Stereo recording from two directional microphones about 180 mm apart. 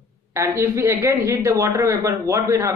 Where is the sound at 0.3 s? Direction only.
15° right (ahead or behind).